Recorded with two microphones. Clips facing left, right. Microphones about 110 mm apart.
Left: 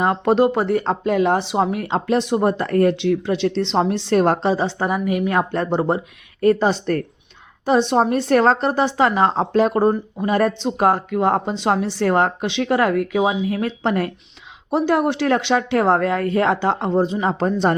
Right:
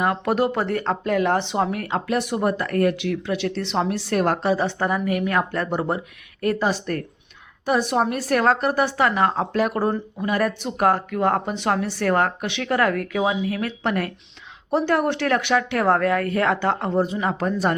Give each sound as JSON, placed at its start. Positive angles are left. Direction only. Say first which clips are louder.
{"t": 0.0, "sound": "speech", "louder": "left 5 dB", "side_deg": 25}